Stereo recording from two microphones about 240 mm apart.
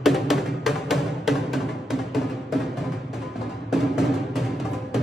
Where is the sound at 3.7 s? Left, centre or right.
Centre.